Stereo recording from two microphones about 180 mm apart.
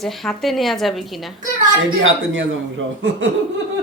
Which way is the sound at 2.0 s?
90° right.